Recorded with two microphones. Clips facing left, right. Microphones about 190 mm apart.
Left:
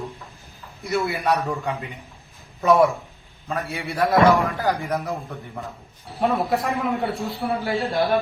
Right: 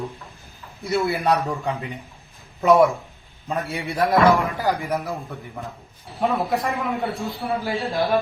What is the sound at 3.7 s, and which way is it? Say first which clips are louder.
Speech: right 2 dB; 15° right (ahead or behind).